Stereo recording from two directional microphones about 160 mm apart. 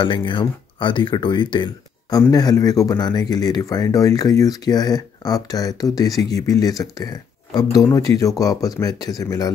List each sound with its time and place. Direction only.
0.0 s speech: 30° left (ahead or behind)